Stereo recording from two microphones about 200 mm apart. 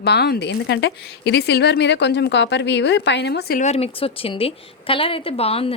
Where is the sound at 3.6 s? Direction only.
35° left (ahead or behind).